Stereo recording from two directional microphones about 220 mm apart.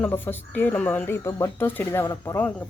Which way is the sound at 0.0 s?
10° left (ahead or behind).